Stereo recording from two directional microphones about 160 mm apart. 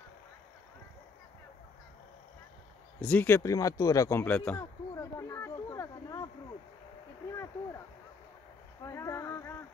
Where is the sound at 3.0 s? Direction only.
10° left (ahead or behind).